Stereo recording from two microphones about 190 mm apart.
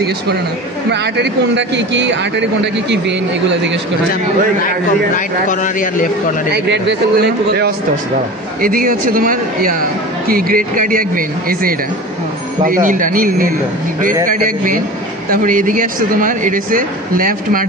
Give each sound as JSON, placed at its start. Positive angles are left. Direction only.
{"t": 1.1, "sound": "speech", "side_deg": -65}
{"t": 4.6, "sound": "a man's voice", "side_deg": 45}
{"t": 6.5, "sound": "a man's voice", "side_deg": -60}